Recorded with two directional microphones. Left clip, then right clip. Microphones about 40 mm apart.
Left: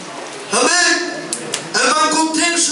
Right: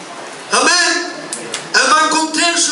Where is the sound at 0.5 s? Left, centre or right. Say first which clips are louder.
Right 2 dB; right.